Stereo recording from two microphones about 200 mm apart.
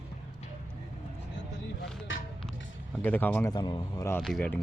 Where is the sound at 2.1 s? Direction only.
70° left (ahead or behind).